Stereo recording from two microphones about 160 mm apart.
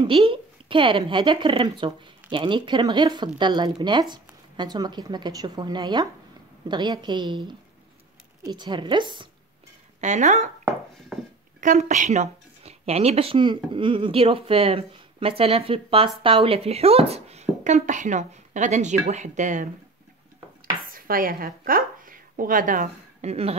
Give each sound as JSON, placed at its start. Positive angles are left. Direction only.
{"t": 0.0, "sound": "speech", "side_deg": -35}
{"t": 9.9, "sound": "speech", "side_deg": -50}
{"t": 11.1, "sound": "a sound", "side_deg": 0}
{"t": 11.6, "sound": "speech", "side_deg": -50}
{"t": 20.8, "sound": "a woman's voice", "side_deg": -60}